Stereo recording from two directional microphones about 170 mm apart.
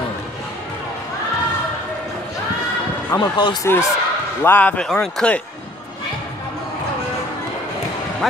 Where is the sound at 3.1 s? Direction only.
25° left (ahead or behind).